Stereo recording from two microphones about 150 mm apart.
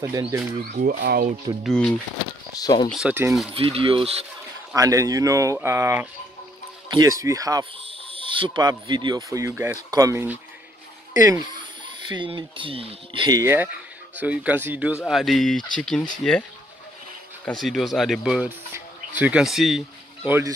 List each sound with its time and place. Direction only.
0.0 s speech: 15° right (ahead or behind)
0.7 s speech: 80° right
1.6 s speech: 5° left (ahead or behind)
2.5 s speech: 25° left (ahead or behind)
2.9 s speech: 5° right (ahead or behind)
3.5 s speech: 40° right (ahead or behind)
4.7 s speech: 20° right (ahead or behind)
8.1 s speech: 35° right (ahead or behind)
11.2 s speech: 30° right (ahead or behind)
13.4 s speech: 15° right (ahead or behind)
15.0 s speech: centre (ahead or behind)
17.5 s speech: centre (ahead or behind)
20.2 s speech: 15° right (ahead or behind)